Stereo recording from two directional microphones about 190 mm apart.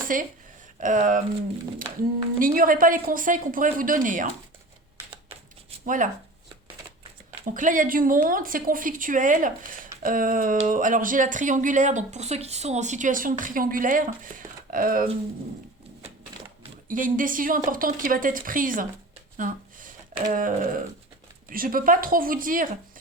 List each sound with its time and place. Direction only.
0.0 s speech: 45° right (ahead or behind)
2.4 s speech: 45° right (ahead or behind)
5.8 s speech: 45° right (ahead or behind)
7.3 s speech: 45° right (ahead or behind)
16.9 s speech: 45° right (ahead or behind)
20.2 s speech: 45° right (ahead or behind)